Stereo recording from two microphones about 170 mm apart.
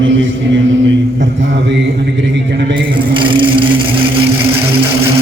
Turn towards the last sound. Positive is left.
turn(degrees=-30)  # may be behind; listen again after turning